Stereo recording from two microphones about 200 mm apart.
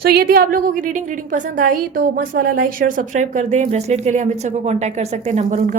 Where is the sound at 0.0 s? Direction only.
50° right (ahead or behind).